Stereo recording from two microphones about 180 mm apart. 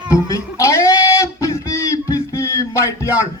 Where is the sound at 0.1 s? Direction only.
15° left (ahead or behind).